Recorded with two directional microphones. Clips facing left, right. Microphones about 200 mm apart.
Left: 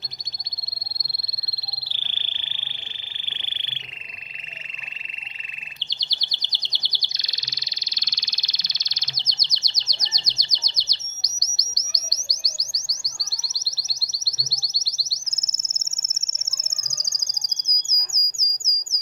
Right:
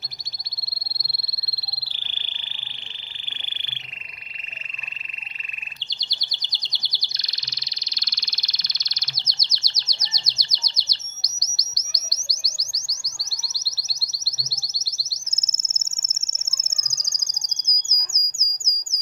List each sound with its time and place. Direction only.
7.2 s frog: 20° left (ahead or behind)
11.5 s chirp: 20° left (ahead or behind)
16.7 s bird: 20° left (ahead or behind)